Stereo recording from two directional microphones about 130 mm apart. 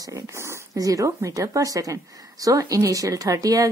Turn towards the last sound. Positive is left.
turn(degrees=-25)  # may be behind; listen again after turning